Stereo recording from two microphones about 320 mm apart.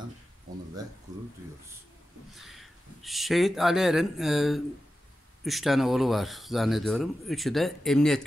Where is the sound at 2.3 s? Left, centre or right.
Centre.